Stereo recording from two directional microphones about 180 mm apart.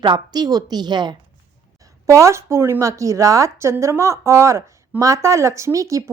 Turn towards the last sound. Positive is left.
turn(degrees=-15)  # may be behind; listen again after turning